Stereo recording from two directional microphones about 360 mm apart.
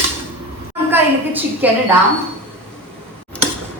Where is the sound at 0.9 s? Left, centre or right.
Centre.